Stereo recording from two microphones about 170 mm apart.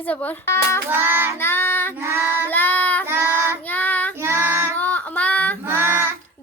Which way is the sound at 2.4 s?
10° left (ahead or behind).